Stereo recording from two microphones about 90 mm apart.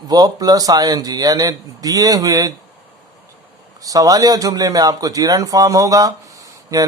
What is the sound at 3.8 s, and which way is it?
A man's voice, 40° right (ahead or behind).